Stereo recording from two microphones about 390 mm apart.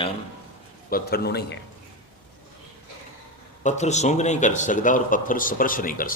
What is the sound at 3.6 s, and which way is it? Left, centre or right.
A man's voice, centre.